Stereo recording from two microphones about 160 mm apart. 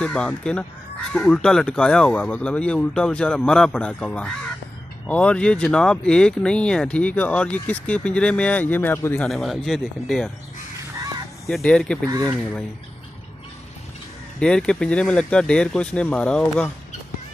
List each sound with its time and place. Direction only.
0.0 s speech: 5° left (ahead or behind)
9.3 s speech: centre (ahead or behind)
11.4 s speech: 5° left (ahead or behind)
12.1 s speech: 20° right (ahead or behind)
14.4 s speech: 5° left (ahead or behind)